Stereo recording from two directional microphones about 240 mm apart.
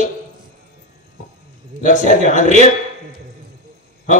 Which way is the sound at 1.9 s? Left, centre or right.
Left.